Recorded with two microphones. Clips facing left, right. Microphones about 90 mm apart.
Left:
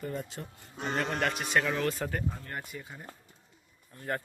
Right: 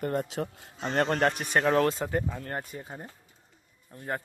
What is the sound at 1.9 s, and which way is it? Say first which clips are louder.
Speech: right 4 dB; 20° right (ahead or behind).